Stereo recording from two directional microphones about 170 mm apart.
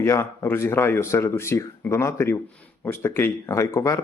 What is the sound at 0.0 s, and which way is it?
A man's voice, 15° left (ahead or behind).